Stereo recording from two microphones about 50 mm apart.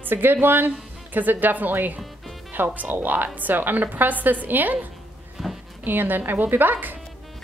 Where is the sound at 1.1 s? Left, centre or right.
Right.